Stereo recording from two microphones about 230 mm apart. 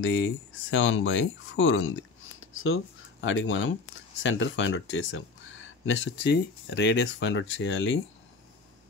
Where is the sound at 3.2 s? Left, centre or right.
Left.